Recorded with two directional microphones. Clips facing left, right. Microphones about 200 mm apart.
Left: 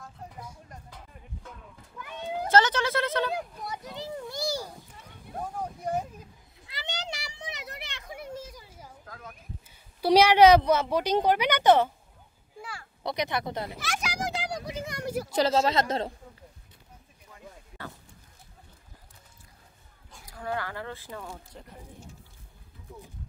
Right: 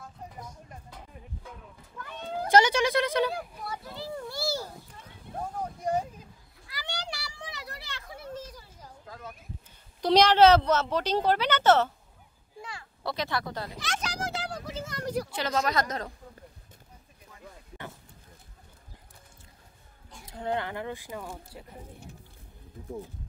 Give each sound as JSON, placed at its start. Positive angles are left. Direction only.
{"t": 2.0, "sound": "cat", "side_deg": 10}
{"t": 2.5, "sound": "speech", "side_deg": -15}
{"t": 3.6, "sound": "a sound", "side_deg": 20}
{"t": 6.6, "sound": "children playing", "side_deg": 20}
{"t": 9.0, "sound": "a sound", "side_deg": -5}
{"t": 10.0, "sound": "speech", "side_deg": 10}
{"t": 13.0, "sound": "speech", "side_deg": 20}
{"t": 13.8, "sound": "a sound", "side_deg": 10}
{"t": 15.3, "sound": "speech", "side_deg": 30}
{"t": 20.2, "sound": "speech", "side_deg": -20}